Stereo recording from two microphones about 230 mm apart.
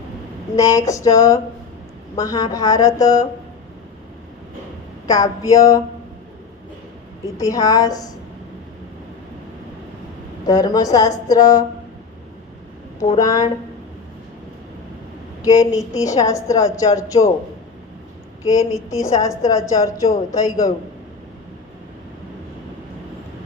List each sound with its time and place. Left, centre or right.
0.5 s a woman's voice: centre
5.0 s a woman's voice: centre
7.3 s a woman's voice: centre
10.4 s a woman's voice: centre
13.1 s a woman's voice: centre
15.4 s a woman's voice: centre
18.4 s a woman's voice: centre